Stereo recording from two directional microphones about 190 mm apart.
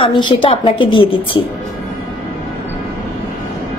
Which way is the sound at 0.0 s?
25° left (ahead or behind).